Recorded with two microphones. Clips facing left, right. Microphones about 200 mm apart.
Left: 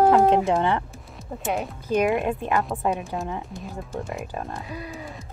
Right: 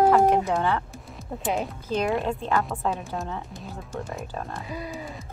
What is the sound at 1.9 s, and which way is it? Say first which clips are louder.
Speech: left 4 dB; 15° left (ahead or behind).